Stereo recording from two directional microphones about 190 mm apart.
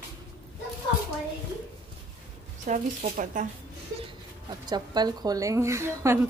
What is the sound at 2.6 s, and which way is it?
Speech, 40° right (ahead or behind).